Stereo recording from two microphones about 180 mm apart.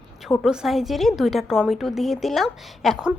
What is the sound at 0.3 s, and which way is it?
A woman's voice, centre (ahead or behind).